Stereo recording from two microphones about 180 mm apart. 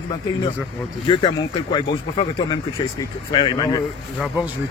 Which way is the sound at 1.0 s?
30° left (ahead or behind).